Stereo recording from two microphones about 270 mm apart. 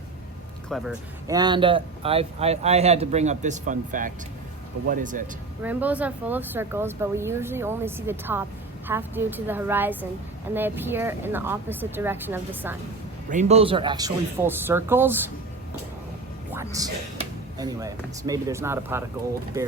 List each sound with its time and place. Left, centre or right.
0.7 s speech: centre
1.3 s speech: centre
5.6 s speech: centre
13.3 s speech: right; by 15.2 s centre
16.7 s speech: centre